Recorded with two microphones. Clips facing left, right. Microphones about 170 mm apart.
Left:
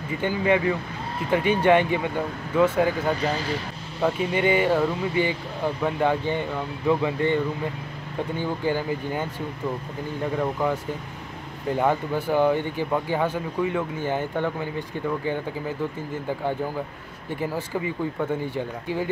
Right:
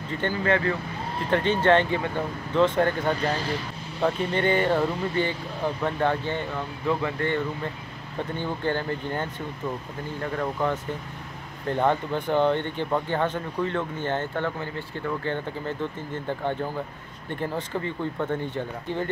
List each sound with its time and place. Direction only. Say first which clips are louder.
0.1 s speech: left 2 dB; 10° left (ahead or behind)
10.3 s speech: left 1 dB; 10° left (ahead or behind)